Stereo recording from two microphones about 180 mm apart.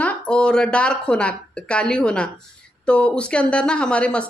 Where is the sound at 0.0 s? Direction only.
5° left (ahead or behind).